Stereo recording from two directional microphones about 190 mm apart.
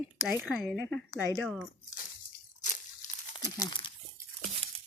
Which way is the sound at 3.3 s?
20° left (ahead or behind).